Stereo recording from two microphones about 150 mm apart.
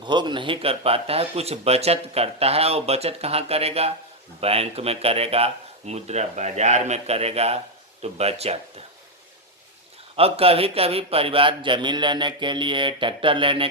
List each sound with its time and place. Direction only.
0.0 s speech: 30° right (ahead or behind)
10.2 s speech: 40° right (ahead or behind)